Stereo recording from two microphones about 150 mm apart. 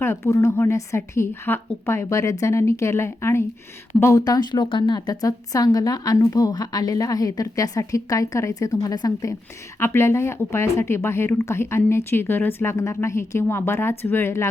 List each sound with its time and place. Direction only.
0.0 s a woman's voice: 15° left (ahead or behind)